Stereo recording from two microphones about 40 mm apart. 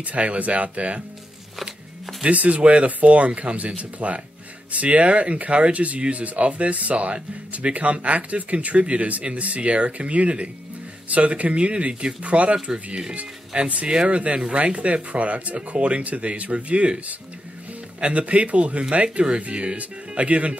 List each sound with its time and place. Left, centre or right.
0.0 s speech: right
2.2 s speech: right
12.7 s speech: centre
13.5 s speech: right
18.0 s speech: right